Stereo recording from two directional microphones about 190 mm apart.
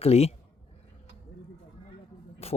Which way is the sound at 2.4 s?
35° left (ahead or behind).